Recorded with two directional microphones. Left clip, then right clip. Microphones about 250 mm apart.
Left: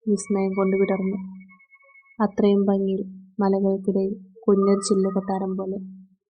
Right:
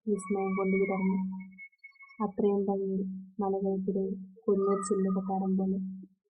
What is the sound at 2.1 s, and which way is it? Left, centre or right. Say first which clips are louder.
Speech: left 8 dB; left.